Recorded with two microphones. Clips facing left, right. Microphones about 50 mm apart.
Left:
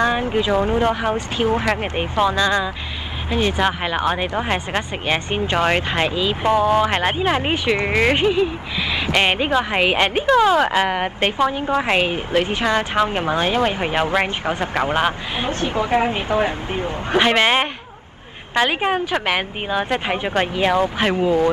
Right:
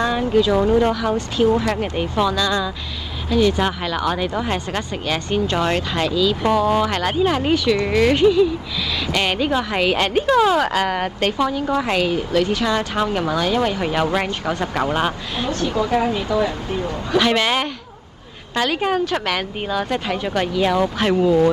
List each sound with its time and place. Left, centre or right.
0.0 s a woman's voice: left